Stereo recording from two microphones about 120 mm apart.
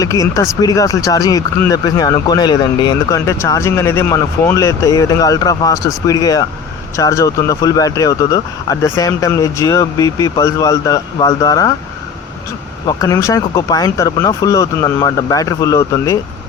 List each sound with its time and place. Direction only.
0.0 s speech: 30° left (ahead or behind)
3.2 s speech: 25° left (ahead or behind)
12.9 s speech: 30° left (ahead or behind)